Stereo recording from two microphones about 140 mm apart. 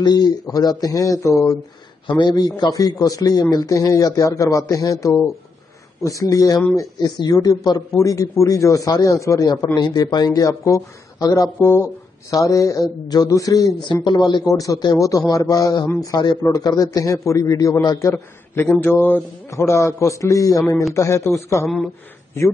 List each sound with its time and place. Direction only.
0.0 s a man's voice: 30° left (ahead or behind)
21.6 s speech: 5° left (ahead or behind)